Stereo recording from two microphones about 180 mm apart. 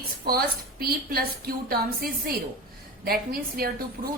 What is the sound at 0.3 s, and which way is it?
A woman's voice, 55° right (ahead or behind).